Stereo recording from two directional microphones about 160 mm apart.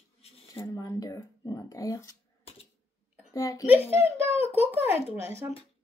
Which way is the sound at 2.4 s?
40° left (ahead or behind).